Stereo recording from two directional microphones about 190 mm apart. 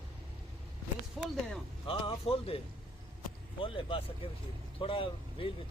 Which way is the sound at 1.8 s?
25° left (ahead or behind).